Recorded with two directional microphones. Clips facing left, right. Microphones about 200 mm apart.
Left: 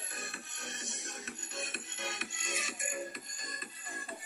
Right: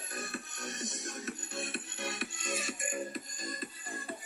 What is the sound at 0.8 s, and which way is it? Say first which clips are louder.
Music: right 9 dB; 35° right (ahead or behind).